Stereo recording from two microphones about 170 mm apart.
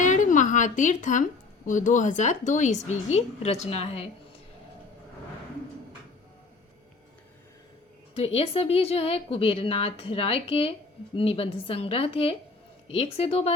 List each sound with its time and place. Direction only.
0.0 s a sound: 45° left (ahead or behind)
1.6 s a woman's voice: 50° left (ahead or behind)
8.1 s a woman's voice: 35° left (ahead or behind)